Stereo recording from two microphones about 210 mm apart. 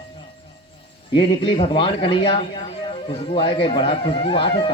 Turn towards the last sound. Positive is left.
turn(degrees=25)  # may be behind; listen again after turning